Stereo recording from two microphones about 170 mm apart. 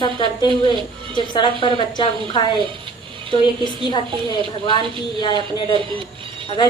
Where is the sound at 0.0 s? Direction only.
30° left (ahead or behind).